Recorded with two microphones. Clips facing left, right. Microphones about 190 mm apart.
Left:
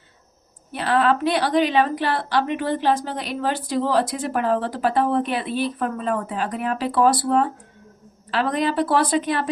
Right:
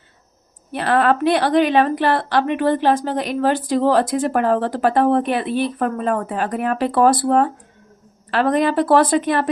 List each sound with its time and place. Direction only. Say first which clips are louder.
0.7 s a woman's voice: right 3 dB; 55° right (ahead or behind)